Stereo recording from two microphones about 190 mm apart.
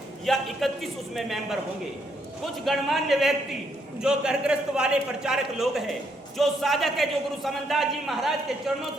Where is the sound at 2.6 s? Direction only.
Centre (ahead or behind).